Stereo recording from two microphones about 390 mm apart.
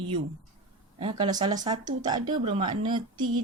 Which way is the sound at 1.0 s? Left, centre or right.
Centre.